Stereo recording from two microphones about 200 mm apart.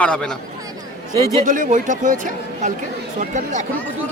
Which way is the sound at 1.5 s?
40° right (ahead or behind).